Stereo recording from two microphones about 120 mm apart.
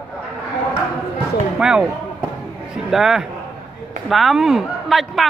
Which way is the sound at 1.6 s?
5° right (ahead or behind).